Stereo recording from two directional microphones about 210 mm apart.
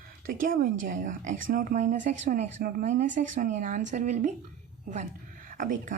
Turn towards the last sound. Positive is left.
turn(degrees=-40)  # may be behind; listen again after turning